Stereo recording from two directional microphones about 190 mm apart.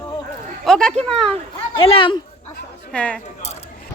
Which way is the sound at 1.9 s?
25° left (ahead or behind).